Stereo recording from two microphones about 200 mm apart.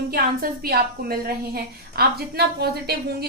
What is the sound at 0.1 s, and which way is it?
A woman's voice, 50° right (ahead or behind).